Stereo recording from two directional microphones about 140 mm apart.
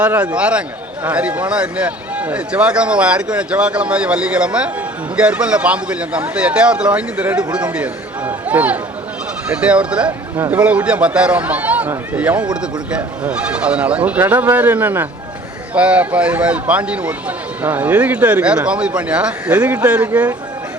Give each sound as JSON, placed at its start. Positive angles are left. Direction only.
{"t": 0.0, "sound": "a man's voice", "side_deg": -10}